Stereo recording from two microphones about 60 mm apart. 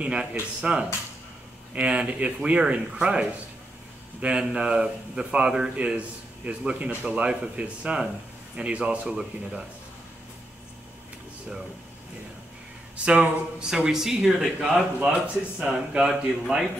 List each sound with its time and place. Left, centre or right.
0.0 s a man's voice: centre
12.9 s a man's voice: centre